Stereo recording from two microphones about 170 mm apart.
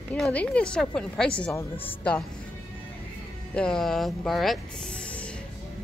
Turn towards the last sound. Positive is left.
turn(degrees=5)  # may be behind; listen again after turning